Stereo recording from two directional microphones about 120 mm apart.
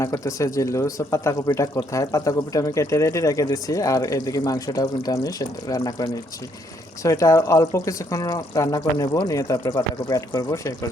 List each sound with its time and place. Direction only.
0.0 s speech: 25° left (ahead or behind)